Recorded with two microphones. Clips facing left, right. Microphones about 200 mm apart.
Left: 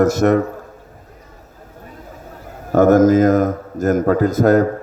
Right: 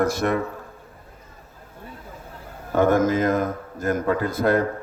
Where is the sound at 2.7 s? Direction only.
45° left (ahead or behind).